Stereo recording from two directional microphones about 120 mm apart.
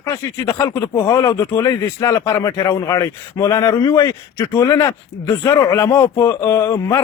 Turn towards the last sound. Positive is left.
turn(degrees=25)  # may be behind; listen again after turning